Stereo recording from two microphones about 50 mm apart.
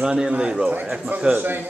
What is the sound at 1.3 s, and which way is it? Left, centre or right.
Speech, right.